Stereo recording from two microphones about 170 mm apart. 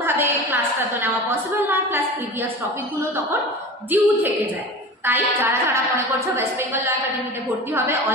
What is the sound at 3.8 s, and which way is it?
A woman's voice, 10° right (ahead or behind).